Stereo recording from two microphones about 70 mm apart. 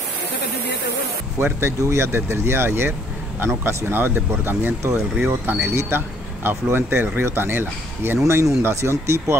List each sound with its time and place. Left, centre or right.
1.4 s speech: right
8.2 s speech: right